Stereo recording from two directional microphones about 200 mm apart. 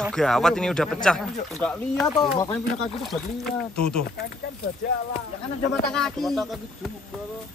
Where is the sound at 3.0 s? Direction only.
Centre (ahead or behind).